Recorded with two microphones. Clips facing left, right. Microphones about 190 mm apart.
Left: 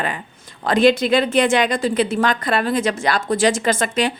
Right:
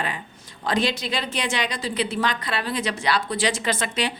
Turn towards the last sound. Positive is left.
turn(degrees=45)  # may be behind; listen again after turning